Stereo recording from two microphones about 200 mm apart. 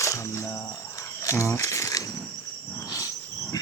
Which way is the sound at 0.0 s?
15° left (ahead or behind).